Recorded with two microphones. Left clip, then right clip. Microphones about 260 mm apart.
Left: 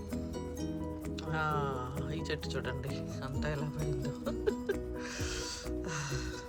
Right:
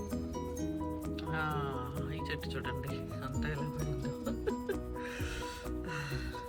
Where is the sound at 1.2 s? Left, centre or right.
Centre.